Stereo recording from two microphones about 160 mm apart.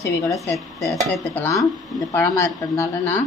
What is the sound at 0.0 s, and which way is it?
Speech, 20° left (ahead or behind).